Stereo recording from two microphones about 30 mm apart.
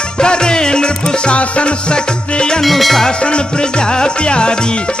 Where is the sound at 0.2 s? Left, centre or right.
Left.